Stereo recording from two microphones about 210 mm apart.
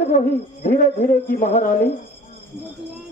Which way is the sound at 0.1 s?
40° left (ahead or behind).